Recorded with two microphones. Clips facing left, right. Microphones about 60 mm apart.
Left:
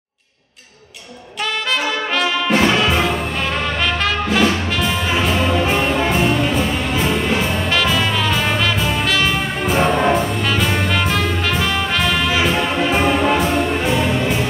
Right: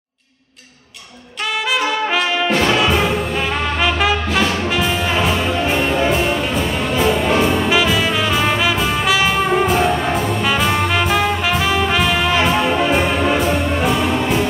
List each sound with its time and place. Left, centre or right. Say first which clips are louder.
2.5 s music: left 1 dB; centre
9.8 s brass instrument: left 2 dB; centre
10.4 s brass instrument: right 2 dB; centre